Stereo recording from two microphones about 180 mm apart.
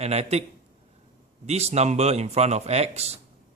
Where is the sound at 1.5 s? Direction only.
35° right (ahead or behind).